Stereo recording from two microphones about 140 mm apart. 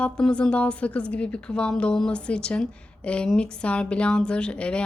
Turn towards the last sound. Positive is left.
turn(degrees=5)  # may be behind; listen again after turning